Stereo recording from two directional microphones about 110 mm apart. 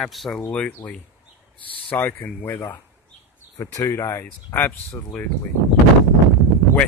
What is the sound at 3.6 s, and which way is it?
Speech, 30° left (ahead or behind).